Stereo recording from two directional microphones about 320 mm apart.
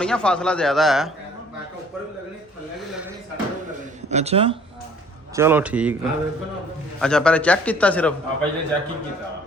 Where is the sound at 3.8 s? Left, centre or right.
Right.